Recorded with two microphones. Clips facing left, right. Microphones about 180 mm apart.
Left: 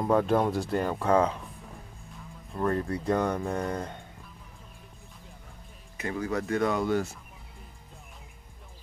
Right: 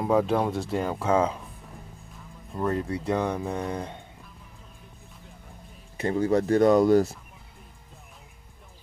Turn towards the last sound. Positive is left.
turn(degrees=-35)  # may be behind; listen again after turning